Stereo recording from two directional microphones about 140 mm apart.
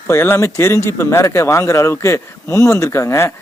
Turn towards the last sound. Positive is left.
turn(degrees=20)  # may be behind; listen again after turning